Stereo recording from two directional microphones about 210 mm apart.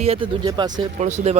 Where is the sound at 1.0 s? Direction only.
35° right (ahead or behind).